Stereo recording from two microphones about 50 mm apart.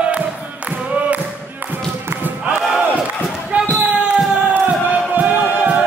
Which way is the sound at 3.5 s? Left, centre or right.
Right.